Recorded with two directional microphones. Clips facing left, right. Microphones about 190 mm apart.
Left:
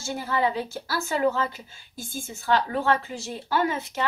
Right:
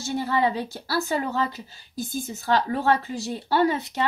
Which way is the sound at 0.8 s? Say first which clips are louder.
Left 2 dB; 35° right (ahead or behind).